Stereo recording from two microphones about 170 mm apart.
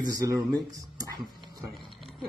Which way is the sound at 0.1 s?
20° right (ahead or behind).